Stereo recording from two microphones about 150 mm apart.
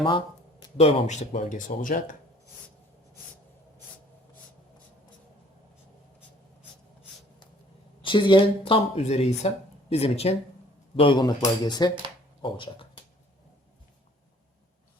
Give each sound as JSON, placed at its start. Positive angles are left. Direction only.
{"t": 0.8, "sound": "speech", "side_deg": 45}
{"t": 8.0, "sound": "speech", "side_deg": 35}
{"t": 12.4, "sound": "a sound", "side_deg": 35}